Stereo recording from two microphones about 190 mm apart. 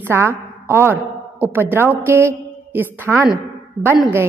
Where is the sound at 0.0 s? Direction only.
10° right (ahead or behind).